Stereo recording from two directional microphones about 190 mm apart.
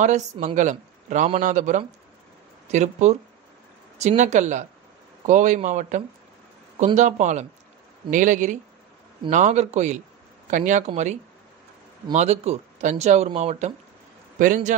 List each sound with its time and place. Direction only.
0.0 s speech: 40° right (ahead or behind)
12.1 s speech: 35° right (ahead or behind)